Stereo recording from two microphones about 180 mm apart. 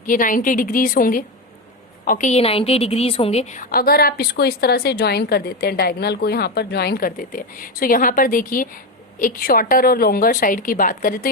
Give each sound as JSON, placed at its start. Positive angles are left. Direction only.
{"t": 0.0, "sound": "a woman's voice", "side_deg": 50}